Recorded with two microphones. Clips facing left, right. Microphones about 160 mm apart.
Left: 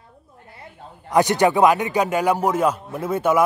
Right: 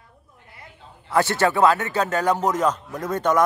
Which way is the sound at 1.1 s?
15° left (ahead or behind).